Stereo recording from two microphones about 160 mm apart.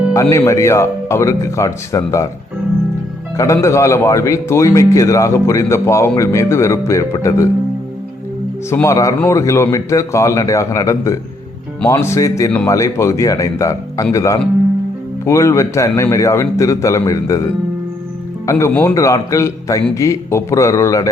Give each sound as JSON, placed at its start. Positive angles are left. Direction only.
{"t": 0.1, "sound": "speech", "side_deg": 20}
{"t": 3.3, "sound": "speech", "side_deg": 20}
{"t": 8.7, "sound": "speech", "side_deg": 20}